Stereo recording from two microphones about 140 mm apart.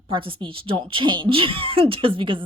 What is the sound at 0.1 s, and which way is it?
Speech, 40° right (ahead or behind).